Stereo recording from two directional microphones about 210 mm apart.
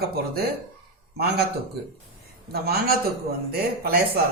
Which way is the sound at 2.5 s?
45° right (ahead or behind).